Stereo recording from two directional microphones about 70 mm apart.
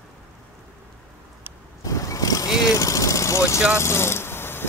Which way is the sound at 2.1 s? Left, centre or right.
Left.